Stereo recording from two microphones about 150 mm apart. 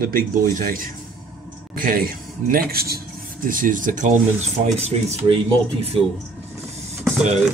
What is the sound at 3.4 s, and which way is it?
Speech, 65° right (ahead or behind).